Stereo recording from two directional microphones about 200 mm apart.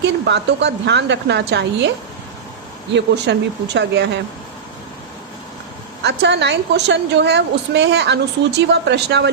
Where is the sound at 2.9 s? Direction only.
60° right (ahead or behind).